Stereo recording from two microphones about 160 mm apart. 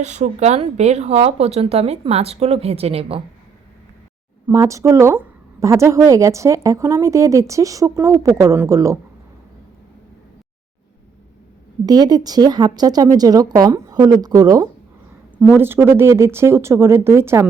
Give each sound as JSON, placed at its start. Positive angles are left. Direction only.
{"t": 0.0, "sound": "speech", "side_deg": -45}
{"t": 4.4, "sound": "a woman's voice", "side_deg": -20}
{"t": 11.9, "sound": "a woman's voice", "side_deg": -25}
{"t": 15.4, "sound": "speech", "side_deg": -10}